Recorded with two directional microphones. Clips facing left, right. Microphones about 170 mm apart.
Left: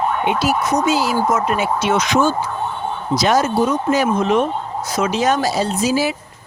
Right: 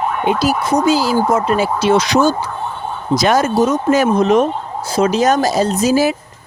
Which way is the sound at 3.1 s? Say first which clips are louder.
Right 3 dB; 50° right (ahead or behind).